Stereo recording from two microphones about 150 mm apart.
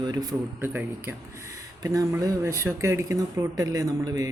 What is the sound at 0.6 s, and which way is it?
Speech, 15° right (ahead or behind).